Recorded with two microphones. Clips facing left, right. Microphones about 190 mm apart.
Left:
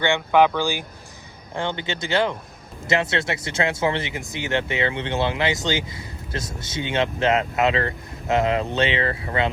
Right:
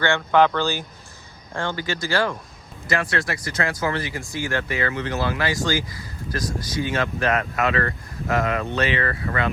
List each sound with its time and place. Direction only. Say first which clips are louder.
0.0 s speech: even; 15° left (ahead or behind)